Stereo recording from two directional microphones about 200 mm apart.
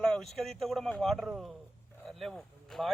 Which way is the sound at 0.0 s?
Centre (ahead or behind).